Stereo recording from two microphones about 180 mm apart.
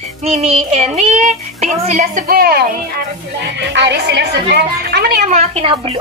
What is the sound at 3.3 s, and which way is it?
A woman's voice, 75° right (ahead or behind).